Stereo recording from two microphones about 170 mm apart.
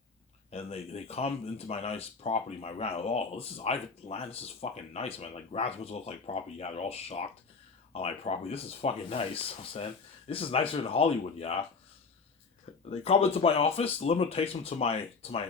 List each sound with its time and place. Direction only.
0.5 s speech: 35° left (ahead or behind)
12.9 s speech: 35° left (ahead or behind)